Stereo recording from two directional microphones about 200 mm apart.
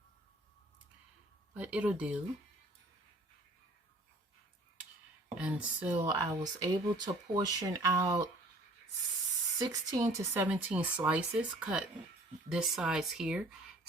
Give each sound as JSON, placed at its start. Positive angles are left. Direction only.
{"t": 1.5, "sound": "speech", "side_deg": -5}
{"t": 5.3, "sound": "speech", "side_deg": -5}
{"t": 6.1, "sound": "speech", "side_deg": -20}
{"t": 9.6, "sound": "speech", "side_deg": -15}